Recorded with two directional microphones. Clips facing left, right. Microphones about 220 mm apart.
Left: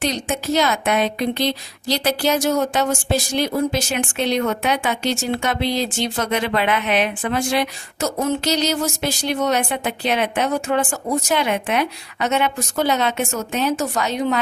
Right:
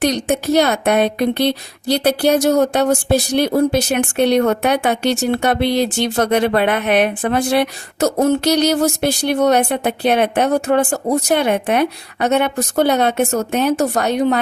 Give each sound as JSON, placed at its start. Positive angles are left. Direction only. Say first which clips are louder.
{"t": 0.0, "sound": "speech", "louder": "right 6 dB", "side_deg": -60}